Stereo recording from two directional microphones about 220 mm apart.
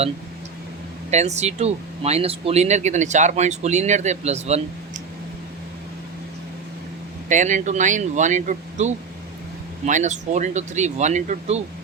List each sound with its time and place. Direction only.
1.1 s speech: 30° right (ahead or behind)
7.3 s speech: 35° right (ahead or behind)